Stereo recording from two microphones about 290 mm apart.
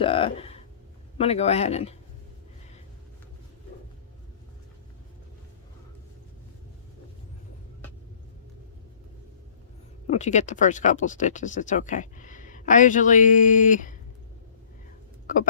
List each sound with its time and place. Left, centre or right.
0.0 s speech: centre
10.1 s speech: left
15.3 s speech: left